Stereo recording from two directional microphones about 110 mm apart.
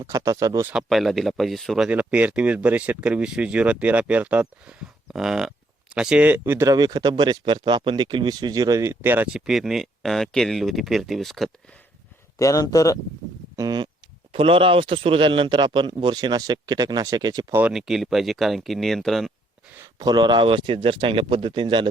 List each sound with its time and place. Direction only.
0.1 s speech: 30° right (ahead or behind)
0.7 s speech: 5° right (ahead or behind)
1.9 s speech: 10° right (ahead or behind)
6.7 s speech: 35° right (ahead or behind); by 11.5 s centre (ahead or behind)
12.4 s speech: 30° left (ahead or behind)
13.6 s a sound: 40° right (ahead or behind)
14.3 s a man's voice: 55° right (ahead or behind); by 17.4 s 35° right (ahead or behind)
17.5 s speech: 15° right (ahead or behind)
17.7 s speech: 5° right (ahead or behind)
20.0 s a man's voice: 40° right (ahead or behind)